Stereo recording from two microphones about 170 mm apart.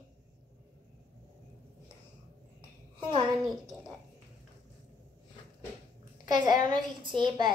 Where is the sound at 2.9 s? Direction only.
30° right (ahead or behind).